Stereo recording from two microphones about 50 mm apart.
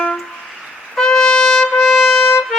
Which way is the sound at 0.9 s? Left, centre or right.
Centre.